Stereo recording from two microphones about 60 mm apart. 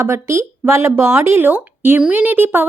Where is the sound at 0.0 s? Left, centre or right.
Right.